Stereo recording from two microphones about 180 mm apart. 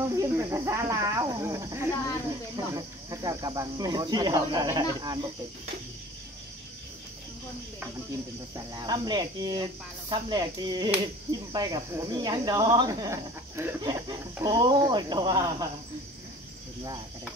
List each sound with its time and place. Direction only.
0.1 s speech: 15° right (ahead or behind)
8.5 s speech: 20° right (ahead or behind)